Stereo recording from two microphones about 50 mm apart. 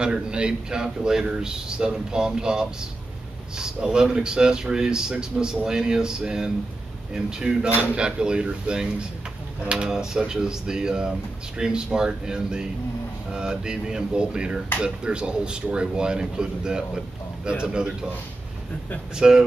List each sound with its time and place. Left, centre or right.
0.0 s speech: centre
19.1 s speech: centre